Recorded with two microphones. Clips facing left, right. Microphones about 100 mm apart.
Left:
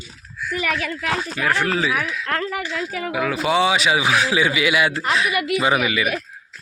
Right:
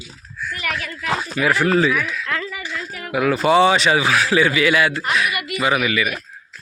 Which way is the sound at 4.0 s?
15° left (ahead or behind).